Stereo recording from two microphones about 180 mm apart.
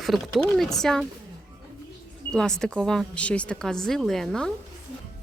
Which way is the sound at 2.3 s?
5° left (ahead or behind).